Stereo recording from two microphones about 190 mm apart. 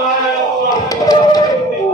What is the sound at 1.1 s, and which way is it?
Music, 20° left (ahead or behind).